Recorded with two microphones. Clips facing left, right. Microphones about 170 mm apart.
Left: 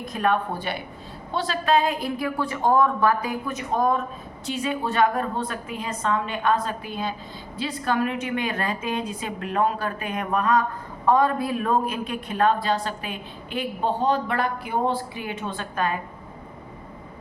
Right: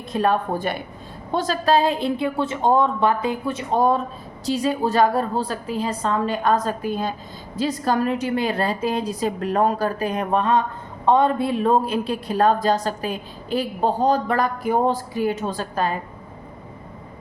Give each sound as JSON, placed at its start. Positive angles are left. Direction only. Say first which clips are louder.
{"t": 0.0, "sound": "a woman's voice", "louder": "right 3 dB", "side_deg": -30}